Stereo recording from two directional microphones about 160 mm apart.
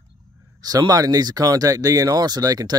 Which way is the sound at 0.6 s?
25° right (ahead or behind).